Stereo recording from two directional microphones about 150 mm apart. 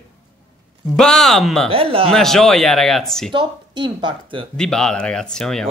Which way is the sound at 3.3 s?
30° right (ahead or behind).